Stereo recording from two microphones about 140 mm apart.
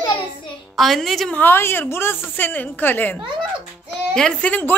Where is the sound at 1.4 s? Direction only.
15° left (ahead or behind).